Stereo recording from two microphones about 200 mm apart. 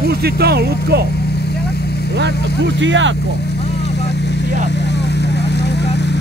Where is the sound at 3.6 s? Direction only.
55° left (ahead or behind).